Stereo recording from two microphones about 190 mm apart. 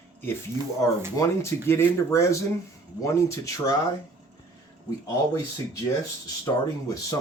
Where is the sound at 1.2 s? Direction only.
15° left (ahead or behind).